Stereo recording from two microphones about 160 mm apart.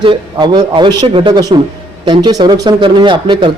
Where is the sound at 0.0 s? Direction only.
30° right (ahead or behind).